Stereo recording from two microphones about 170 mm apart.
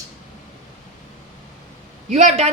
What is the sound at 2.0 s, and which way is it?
Speech, 45° right (ahead or behind).